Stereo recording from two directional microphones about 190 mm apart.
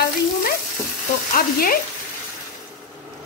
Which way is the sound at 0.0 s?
55° left (ahead or behind).